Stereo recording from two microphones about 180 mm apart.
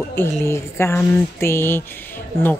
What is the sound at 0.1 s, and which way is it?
Speech, 15° left (ahead or behind).